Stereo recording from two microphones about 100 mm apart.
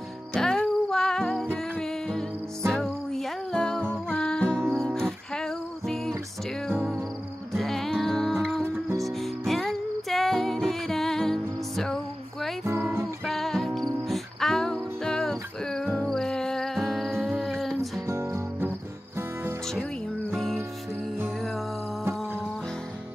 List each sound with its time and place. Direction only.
0.3 s music: 5° left (ahead or behind)
7.5 s music: 5° left (ahead or behind)
18.0 s music: 30° right (ahead or behind)
20.3 s music: centre (ahead or behind)